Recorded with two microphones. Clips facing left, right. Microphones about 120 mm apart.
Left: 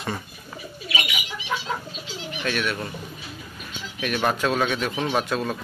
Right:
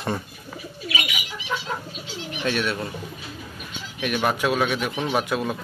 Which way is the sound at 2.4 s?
25° right (ahead or behind).